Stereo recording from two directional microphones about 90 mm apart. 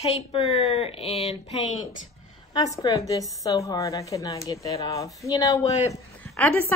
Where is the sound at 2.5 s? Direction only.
45° left (ahead or behind).